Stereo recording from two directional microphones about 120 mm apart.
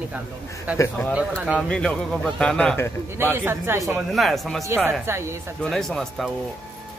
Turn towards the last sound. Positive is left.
turn(degrees=0)  # may be behind; listen again after turning